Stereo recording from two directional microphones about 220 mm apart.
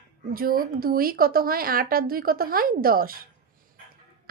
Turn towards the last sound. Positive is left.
turn(degrees=-40)  # may be behind; listen again after turning